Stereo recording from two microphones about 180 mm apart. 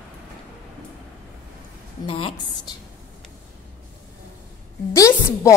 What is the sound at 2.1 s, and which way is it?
Speech, 30° left (ahead or behind).